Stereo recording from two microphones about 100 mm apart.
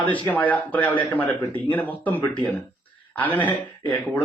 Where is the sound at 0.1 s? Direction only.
15° left (ahead or behind).